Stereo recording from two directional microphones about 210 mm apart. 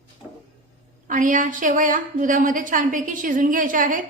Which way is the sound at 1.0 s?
40° right (ahead or behind).